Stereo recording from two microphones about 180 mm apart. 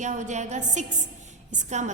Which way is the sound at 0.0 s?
40° right (ahead or behind).